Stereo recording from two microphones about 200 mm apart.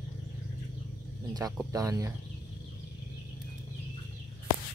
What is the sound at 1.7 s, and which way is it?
Speech, 15° right (ahead or behind).